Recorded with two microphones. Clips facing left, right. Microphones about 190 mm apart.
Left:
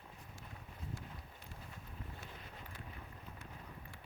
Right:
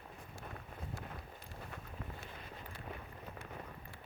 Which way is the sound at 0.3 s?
65° right (ahead or behind).